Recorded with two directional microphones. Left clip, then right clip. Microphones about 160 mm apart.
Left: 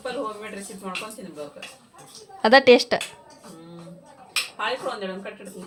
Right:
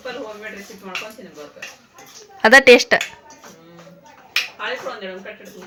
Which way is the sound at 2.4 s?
10° left (ahead or behind).